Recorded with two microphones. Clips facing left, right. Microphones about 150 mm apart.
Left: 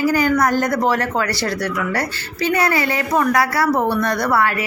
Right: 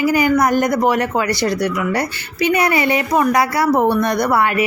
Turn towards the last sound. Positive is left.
turn(degrees=-15)  # may be behind; listen again after turning